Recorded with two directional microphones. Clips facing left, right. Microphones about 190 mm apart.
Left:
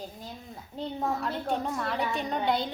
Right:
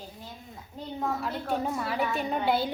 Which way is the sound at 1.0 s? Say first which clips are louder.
Even; 5° right (ahead or behind).